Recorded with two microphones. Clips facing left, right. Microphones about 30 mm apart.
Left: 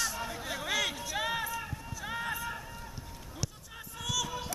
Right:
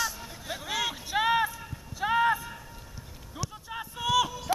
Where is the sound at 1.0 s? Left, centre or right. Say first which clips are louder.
Right 8 dB; right.